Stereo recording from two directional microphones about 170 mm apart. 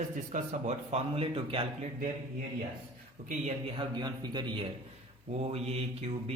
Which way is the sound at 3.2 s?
50° right (ahead or behind).